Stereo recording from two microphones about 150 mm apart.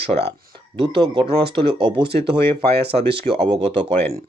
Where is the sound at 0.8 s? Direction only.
35° right (ahead or behind).